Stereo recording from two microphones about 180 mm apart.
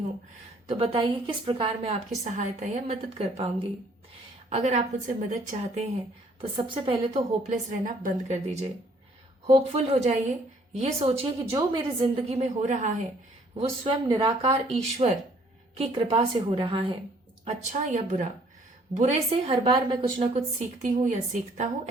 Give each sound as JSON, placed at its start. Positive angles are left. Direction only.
{"t": 0.7, "sound": "a woman's voice", "side_deg": -30}
{"t": 6.4, "sound": "a woman's voice", "side_deg": -30}
{"t": 14.1, "sound": "a woman's voice", "side_deg": -25}
{"t": 17.4, "sound": "a woman's voice", "side_deg": -40}
{"t": 20.8, "sound": "speech", "side_deg": -45}